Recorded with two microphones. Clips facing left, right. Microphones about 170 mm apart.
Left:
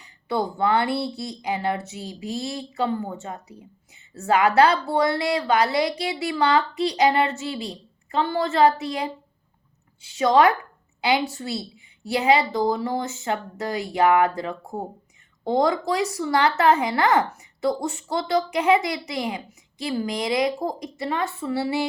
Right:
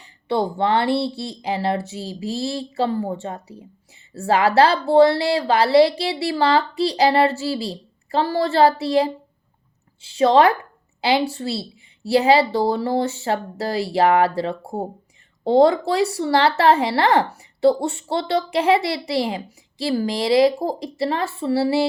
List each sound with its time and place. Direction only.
0.0 s a woman's voice: 30° right (ahead or behind)